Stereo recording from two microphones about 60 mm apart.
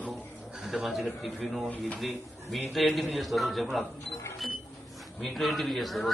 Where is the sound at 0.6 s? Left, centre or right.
Centre.